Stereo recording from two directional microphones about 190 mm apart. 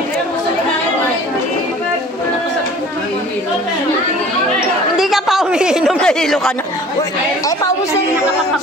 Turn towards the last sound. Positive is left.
turn(degrees=15)  # may be behind; listen again after turning